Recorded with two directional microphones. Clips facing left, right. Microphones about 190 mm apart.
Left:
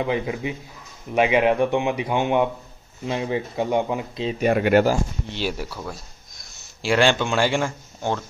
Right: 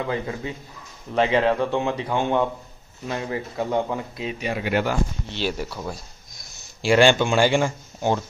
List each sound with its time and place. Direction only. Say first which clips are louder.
0.0 s speech: left 3 dB; 15° left (ahead or behind)
4.4 s speech: left 8 dB; 55° left (ahead or behind)
5.3 s speech: even; 10° left (ahead or behind)
6.8 s speech: right 3 dB; centre (ahead or behind)